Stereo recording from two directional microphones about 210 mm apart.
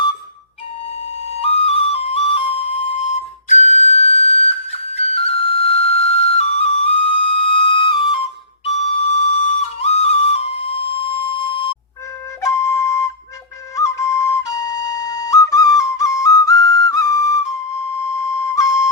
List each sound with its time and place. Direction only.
1.4 s flute: 30° left (ahead or behind); by 18.6 s 15° left (ahead or behind)